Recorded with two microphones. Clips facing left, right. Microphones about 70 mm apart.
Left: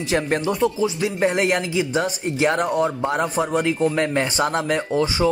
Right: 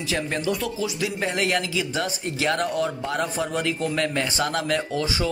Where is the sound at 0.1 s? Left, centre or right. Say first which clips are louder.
Left 5 dB; left.